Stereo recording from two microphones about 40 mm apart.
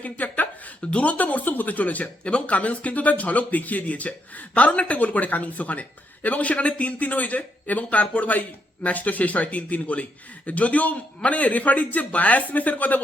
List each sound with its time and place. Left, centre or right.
0.0 s speech: left
0.8 s speech: left